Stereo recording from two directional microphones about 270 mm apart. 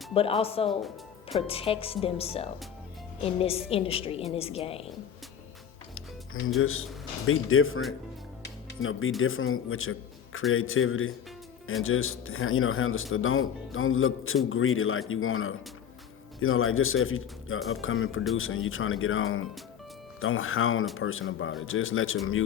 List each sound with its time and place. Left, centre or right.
0.1 s a woman's voice: left
6.6 s speech: left
8.8 s speech: left